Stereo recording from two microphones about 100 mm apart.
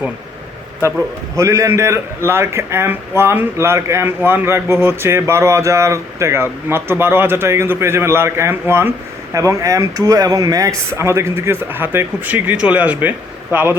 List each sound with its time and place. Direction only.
1.4 s speech: 30° right (ahead or behind)
9.3 s speech: 35° right (ahead or behind)